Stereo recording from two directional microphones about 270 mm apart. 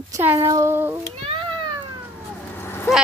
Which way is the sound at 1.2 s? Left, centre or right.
Centre.